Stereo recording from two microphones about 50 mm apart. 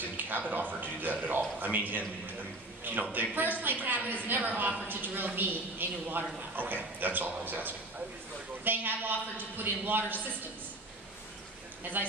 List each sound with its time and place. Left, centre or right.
0.2 s a woman's voice: right
12.0 s speech: right